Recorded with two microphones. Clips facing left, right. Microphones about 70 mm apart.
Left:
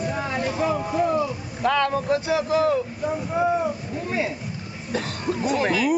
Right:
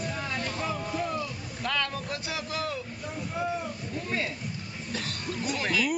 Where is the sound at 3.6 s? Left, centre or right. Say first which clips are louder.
Left 8 dB; centre.